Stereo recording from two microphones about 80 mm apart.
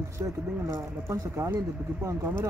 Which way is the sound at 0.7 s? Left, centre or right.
Right.